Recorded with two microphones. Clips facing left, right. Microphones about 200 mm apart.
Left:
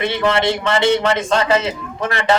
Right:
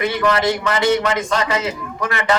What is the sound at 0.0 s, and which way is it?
A man's voice, 25° left (ahead or behind).